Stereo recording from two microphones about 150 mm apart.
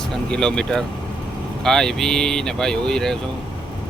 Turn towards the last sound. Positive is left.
turn(degrees=5)  # may be behind; listen again after turning